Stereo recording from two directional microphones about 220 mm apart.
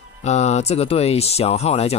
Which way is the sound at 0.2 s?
30° left (ahead or behind).